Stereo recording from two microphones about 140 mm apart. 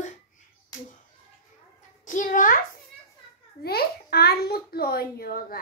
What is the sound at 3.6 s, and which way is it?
A child's voice, 90° left.